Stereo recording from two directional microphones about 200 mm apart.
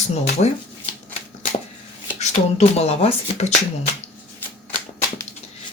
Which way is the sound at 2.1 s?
35° left (ahead or behind).